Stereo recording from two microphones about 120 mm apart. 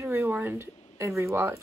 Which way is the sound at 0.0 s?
20° right (ahead or behind).